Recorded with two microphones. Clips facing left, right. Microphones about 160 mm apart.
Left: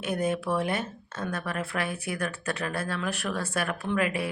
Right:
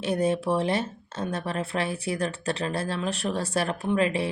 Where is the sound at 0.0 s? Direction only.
30° right (ahead or behind).